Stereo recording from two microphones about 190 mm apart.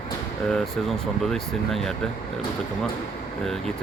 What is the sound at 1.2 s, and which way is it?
Speech, centre (ahead or behind).